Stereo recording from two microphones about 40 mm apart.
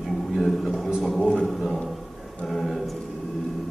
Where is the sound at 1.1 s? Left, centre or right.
Left.